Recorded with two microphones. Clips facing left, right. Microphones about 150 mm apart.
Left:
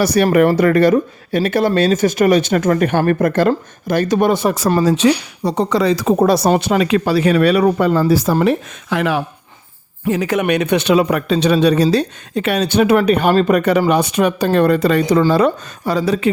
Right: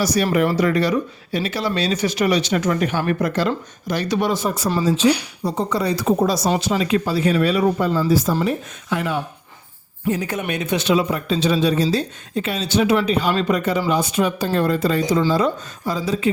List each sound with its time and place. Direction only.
0.0 s speech: 60° left (ahead or behind); by 4.7 s 80° left
4.7 s speech: 65° left (ahead or behind); by 6.1 s 90° left
6.1 s a man's voice: 60° left (ahead or behind)